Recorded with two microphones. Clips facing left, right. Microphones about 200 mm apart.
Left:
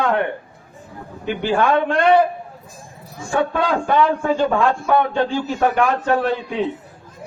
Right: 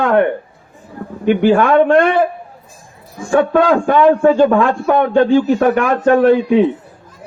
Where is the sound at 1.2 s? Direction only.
55° right (ahead or behind).